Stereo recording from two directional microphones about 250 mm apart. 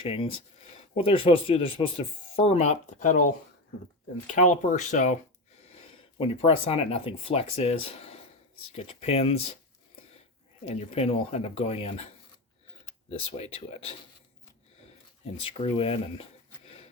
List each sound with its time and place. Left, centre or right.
0.0 s speech: left
10.7 s speech: left
13.1 s speech: left
15.4 s speech: left